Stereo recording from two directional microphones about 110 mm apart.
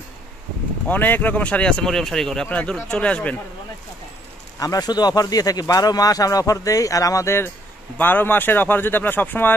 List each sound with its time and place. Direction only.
0.8 s speech: 15° left (ahead or behind)
4.6 s a man's voice: 35° left (ahead or behind); by 9.6 s 20° left (ahead or behind)